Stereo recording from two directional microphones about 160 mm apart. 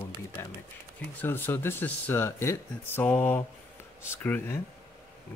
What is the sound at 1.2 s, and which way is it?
Speech, 15° left (ahead or behind).